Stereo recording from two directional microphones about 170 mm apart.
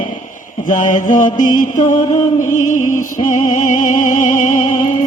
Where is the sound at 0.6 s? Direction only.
50° left (ahead or behind).